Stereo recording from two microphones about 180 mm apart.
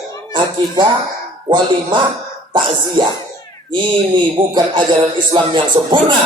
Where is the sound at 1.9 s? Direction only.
25° right (ahead or behind).